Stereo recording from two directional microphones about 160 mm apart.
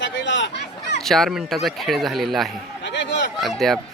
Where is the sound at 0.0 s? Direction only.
90° left.